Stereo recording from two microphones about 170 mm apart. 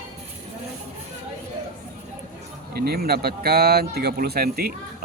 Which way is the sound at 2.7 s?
65° right (ahead or behind).